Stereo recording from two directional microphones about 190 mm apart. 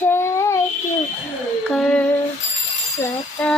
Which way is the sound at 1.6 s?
5° left (ahead or behind).